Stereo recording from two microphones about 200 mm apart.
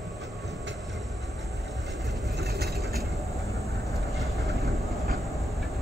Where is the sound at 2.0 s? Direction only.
Centre (ahead or behind).